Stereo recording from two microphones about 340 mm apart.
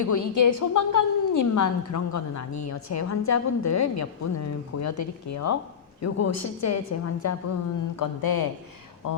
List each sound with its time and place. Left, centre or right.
0.0 s a woman's voice: left
7.9 s speech: left
9.0 s speech: left